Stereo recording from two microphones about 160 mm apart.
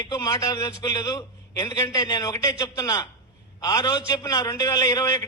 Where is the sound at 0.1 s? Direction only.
20° left (ahead or behind).